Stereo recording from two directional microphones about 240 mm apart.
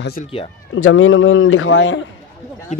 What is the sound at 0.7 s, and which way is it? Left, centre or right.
A man's voice, left.